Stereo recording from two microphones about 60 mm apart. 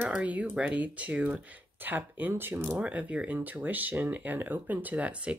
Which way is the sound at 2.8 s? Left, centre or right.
Right.